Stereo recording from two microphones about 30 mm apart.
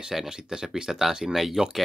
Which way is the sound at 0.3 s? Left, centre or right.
Right.